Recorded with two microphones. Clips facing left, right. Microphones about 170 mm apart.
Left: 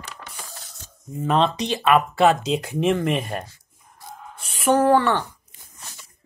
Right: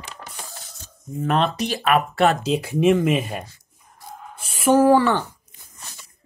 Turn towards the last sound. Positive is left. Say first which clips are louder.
# right 2 dB
turn(degrees=-5)  # may be behind; listen again after turning